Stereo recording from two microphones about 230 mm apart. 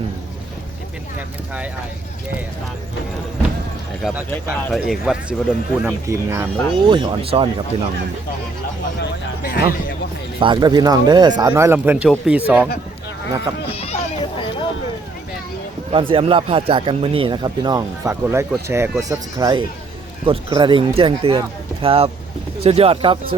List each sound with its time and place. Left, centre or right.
4.0 s speech: centre
6.1 s speech: centre
9.0 s speech: left
10.4 s speech: centre
13.7 s children playing: left
15.9 s speech: right